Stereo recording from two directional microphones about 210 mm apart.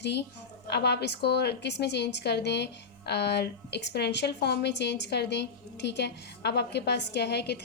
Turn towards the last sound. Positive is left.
turn(degrees=50)  # may be behind; listen again after turning